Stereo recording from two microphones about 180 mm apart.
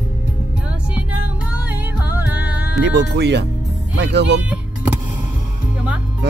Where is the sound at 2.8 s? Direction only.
75° right (ahead or behind).